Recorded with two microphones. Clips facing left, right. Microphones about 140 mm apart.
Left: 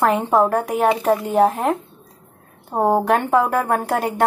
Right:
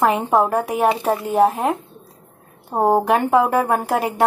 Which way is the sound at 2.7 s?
5° right (ahead or behind).